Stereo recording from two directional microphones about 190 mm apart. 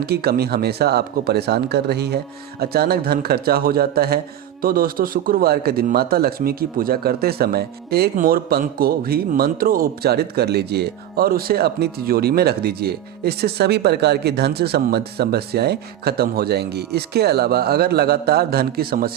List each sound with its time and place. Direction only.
0.0 s a man's voice: 55° right (ahead or behind)